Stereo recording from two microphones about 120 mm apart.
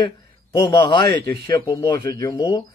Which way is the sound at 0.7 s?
40° left (ahead or behind).